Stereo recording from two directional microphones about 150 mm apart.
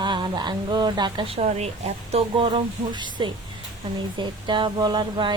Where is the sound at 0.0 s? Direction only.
30° right (ahead or behind).